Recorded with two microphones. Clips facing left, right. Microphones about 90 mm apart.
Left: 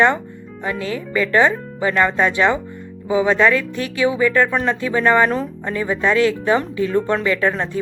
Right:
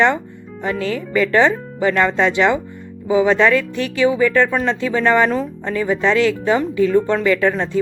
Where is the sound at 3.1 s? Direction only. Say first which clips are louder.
Right 2 dB; 20° left (ahead or behind).